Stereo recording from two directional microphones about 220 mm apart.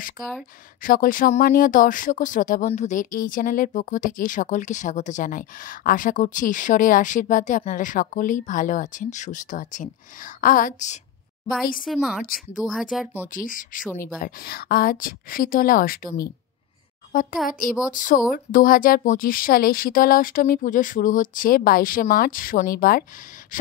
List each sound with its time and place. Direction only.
0.8 s speech: 40° left (ahead or behind)
11.8 s speech: centre (ahead or behind)
13.3 s a woman's voice: 40° left (ahead or behind)
23.5 s gasp: 40° left (ahead or behind)